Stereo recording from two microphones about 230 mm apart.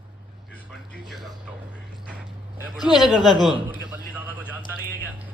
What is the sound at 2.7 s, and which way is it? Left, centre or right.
Speech, centre.